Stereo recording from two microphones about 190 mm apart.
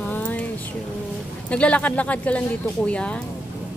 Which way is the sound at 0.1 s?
10° left (ahead or behind).